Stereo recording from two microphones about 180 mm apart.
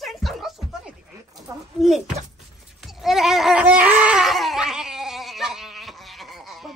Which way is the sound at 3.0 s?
Centre (ahead or behind).